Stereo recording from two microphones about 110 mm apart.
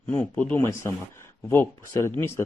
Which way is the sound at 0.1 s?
10° left (ahead or behind).